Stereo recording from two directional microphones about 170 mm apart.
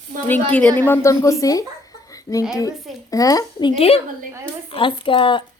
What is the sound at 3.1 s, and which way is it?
Speech, 20° left (ahead or behind).